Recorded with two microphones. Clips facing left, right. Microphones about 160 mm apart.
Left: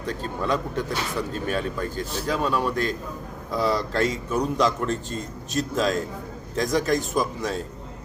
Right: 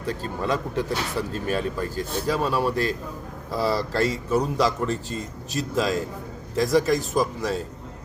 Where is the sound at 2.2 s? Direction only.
35° right (ahead or behind).